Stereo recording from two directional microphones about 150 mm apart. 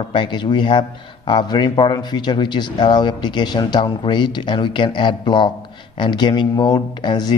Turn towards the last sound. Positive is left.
turn(degrees=30)  # may be behind; listen again after turning